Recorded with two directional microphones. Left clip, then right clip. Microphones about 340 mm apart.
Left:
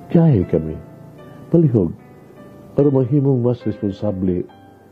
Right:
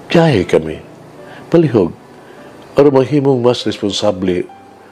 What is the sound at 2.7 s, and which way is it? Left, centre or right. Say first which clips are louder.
Speech: right 7 dB; centre.